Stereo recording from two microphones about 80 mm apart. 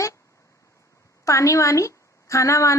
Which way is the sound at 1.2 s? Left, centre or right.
Left.